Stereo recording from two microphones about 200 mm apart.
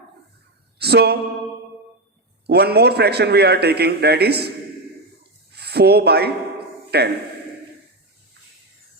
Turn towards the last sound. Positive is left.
turn(degrees=-55)  # may be behind; listen again after turning